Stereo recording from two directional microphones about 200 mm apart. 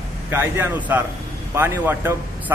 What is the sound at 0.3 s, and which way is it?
A man's voice, 10° right (ahead or behind).